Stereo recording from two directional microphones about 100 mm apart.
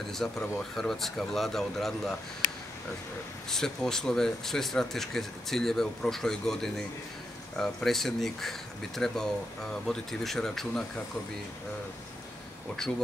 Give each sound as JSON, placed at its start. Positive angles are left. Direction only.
{"t": 0.0, "sound": "speech", "side_deg": 5}
{"t": 3.4, "sound": "speech", "side_deg": 5}